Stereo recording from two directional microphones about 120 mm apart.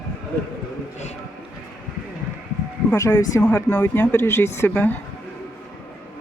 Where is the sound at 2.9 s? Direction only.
20° left (ahead or behind).